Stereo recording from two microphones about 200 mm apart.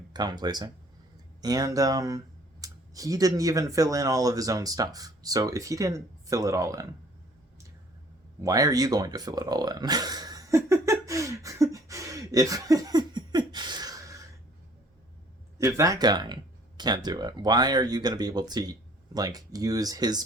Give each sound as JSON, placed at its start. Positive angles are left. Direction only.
{"t": 0.1, "sound": "speech", "side_deg": -20}
{"t": 8.4, "sound": "a sound", "side_deg": -15}
{"t": 15.5, "sound": "speech", "side_deg": -15}